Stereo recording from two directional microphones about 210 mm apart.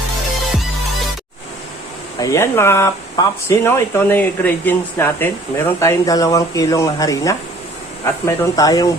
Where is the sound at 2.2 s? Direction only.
15° left (ahead or behind).